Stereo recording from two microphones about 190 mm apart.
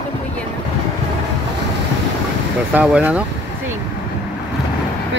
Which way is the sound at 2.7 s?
5° right (ahead or behind).